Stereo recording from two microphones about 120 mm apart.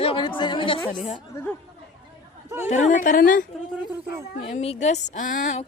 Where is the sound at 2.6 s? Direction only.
85° left.